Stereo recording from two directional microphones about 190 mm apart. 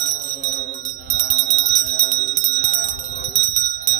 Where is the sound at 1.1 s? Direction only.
35° left (ahead or behind).